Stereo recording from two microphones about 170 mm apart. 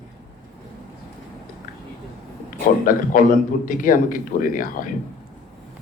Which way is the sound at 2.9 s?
55° left (ahead or behind).